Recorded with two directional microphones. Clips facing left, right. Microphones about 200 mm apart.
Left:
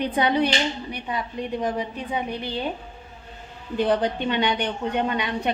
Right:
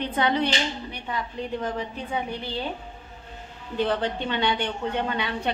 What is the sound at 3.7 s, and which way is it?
A woman's voice, 15° left (ahead or behind).